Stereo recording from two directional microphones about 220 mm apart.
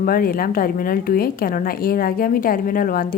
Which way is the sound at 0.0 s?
40° left (ahead or behind).